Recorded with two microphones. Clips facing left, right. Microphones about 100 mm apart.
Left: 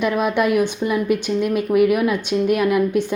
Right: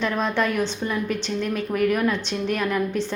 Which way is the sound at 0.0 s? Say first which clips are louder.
Left 5 dB; 10° left (ahead or behind).